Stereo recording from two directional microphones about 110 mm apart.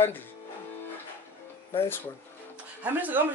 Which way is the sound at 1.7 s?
20° left (ahead or behind).